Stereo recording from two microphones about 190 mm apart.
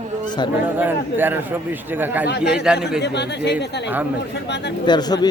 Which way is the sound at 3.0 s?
65° left (ahead or behind).